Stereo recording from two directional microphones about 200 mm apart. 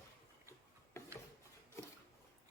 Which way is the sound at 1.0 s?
15° left (ahead or behind).